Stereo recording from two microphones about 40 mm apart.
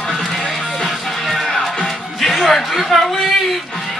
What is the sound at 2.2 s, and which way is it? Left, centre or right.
Chatter, centre.